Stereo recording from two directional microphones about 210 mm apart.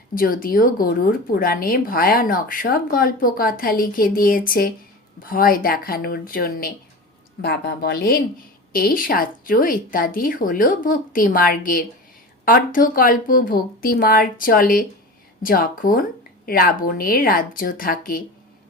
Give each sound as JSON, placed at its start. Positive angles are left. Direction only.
{"t": 0.1, "sound": "speech", "side_deg": 40}